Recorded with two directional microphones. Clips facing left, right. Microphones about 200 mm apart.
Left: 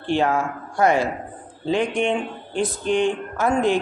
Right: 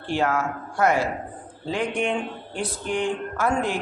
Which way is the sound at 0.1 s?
25° left (ahead or behind).